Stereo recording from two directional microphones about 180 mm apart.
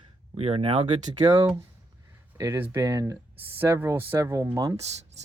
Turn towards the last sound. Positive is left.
turn(degrees=-20)  # may be behind; listen again after turning